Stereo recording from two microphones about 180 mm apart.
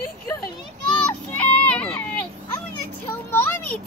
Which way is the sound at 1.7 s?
5° left (ahead or behind).